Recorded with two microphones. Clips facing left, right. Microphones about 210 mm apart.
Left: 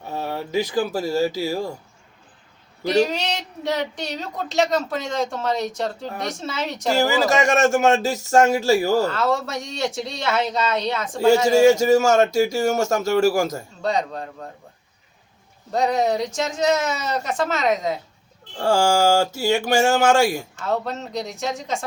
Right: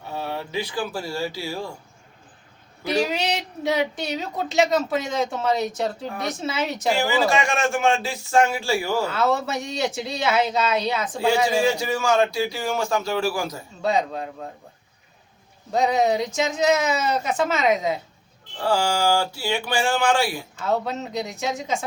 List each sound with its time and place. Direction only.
0.0 s speech: 45° left (ahead or behind)
2.8 s speech: 5° right (ahead or behind)
6.9 s a man's voice: 40° left (ahead or behind)
9.0 s speech: 5° right (ahead or behind)
11.3 s a man's voice: 45° left (ahead or behind)
13.8 s speech: 5° right (ahead or behind)
15.7 s speech: centre (ahead or behind)
18.5 s a man's voice: 45° left (ahead or behind)
20.7 s speech: centre (ahead or behind)